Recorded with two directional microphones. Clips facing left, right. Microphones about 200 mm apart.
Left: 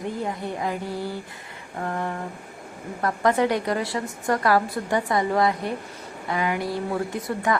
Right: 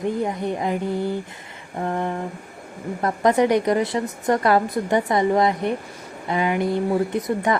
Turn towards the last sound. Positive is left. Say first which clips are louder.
# right 4 dB
turn(degrees=-20)  # may be behind; listen again after turning